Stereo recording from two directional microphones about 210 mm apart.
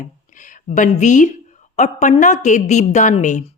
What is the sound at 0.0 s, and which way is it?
Speech, 40° left (ahead or behind).